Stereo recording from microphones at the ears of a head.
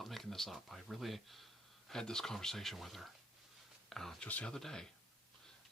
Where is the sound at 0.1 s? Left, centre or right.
Centre.